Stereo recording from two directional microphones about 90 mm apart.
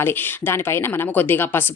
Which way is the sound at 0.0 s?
30° left (ahead or behind).